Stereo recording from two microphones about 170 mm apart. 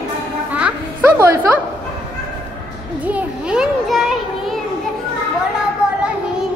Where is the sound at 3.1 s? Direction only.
5° right (ahead or behind).